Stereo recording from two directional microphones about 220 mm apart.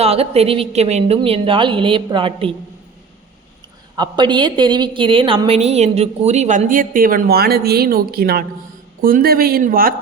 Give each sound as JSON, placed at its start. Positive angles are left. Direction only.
{"t": 0.0, "sound": "a woman's voice", "side_deg": -25}
{"t": 3.9, "sound": "a woman's voice", "side_deg": -20}